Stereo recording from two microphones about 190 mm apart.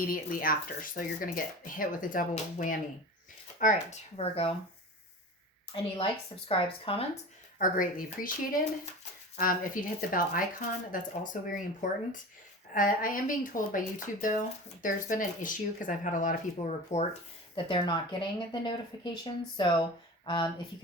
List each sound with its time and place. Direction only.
0.0 s speech: 45° left (ahead or behind); by 4.5 s 30° left (ahead or behind)
6.5 s speech: 30° left (ahead or behind)
7.6 s speech: 45° left (ahead or behind)
9.3 s speech: 45° left (ahead or behind)
17.5 s speech: 25° left (ahead or behind)